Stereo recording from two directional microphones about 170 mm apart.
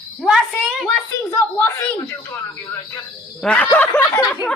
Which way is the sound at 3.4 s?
5° left (ahead or behind).